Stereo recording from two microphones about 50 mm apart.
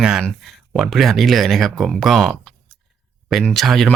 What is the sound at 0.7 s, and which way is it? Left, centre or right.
Speech, centre.